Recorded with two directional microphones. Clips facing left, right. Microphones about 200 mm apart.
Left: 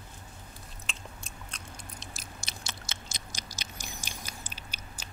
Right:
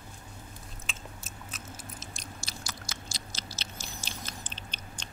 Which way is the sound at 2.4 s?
25° left (ahead or behind).